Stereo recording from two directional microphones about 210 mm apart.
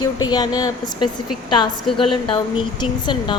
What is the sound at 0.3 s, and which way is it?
Speech, 20° left (ahead or behind).